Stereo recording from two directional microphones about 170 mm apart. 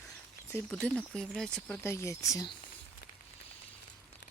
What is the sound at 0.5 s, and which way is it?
Speech, 10° left (ahead or behind).